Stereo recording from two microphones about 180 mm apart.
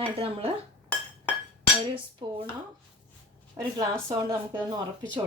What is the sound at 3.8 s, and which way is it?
Speech, 20° right (ahead or behind).